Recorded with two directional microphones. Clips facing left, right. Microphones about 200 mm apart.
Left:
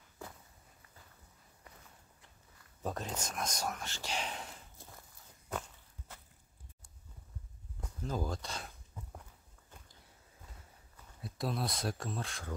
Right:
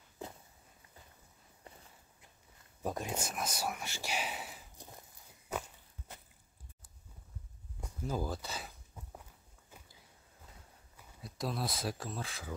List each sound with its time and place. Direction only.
2.8 s speech: 10° right (ahead or behind)
4.7 s walk: 20° right (ahead or behind)
7.8 s walk: 10° right (ahead or behind)
9.7 s a sound: 5° right (ahead or behind)
11.1 s speech: centre (ahead or behind)